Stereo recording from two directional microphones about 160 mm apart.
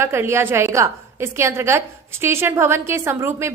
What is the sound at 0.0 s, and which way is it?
A woman's voice, 15° right (ahead or behind).